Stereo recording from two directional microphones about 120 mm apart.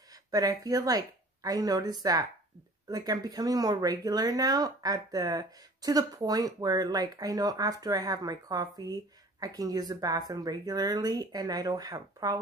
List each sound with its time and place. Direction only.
0.1 s a woman's voice: 30° right (ahead or behind)